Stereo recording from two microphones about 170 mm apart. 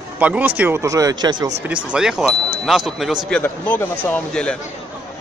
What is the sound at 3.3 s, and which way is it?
A man's voice, 10° left (ahead or behind).